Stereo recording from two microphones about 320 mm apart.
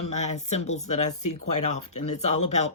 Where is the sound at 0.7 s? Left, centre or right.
Left.